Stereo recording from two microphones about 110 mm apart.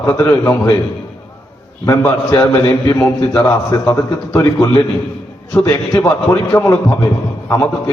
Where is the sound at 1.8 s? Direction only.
20° left (ahead or behind).